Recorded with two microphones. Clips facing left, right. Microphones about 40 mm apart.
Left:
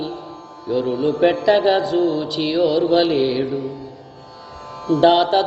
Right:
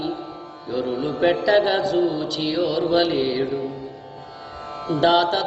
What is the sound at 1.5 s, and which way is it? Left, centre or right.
Mantra, centre.